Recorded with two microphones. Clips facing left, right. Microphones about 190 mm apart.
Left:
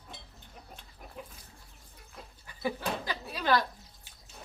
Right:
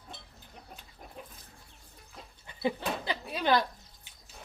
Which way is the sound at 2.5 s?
25° right (ahead or behind).